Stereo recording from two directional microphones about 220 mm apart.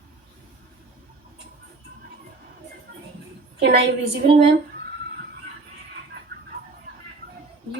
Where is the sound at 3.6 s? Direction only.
50° right (ahead or behind).